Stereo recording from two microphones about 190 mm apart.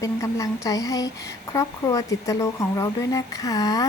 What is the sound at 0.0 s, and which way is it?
Speech, 15° left (ahead or behind).